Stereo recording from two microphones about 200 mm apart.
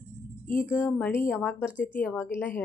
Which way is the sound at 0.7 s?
5° left (ahead or behind).